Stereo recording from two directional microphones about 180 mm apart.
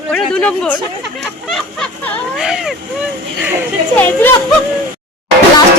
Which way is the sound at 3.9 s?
10° left (ahead or behind).